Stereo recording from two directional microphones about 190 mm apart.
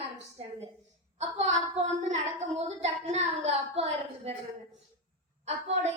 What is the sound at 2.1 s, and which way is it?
Speech, 35° right (ahead or behind).